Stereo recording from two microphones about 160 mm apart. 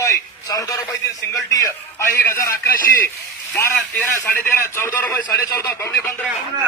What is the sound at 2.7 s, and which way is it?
Speech, 60° left (ahead or behind).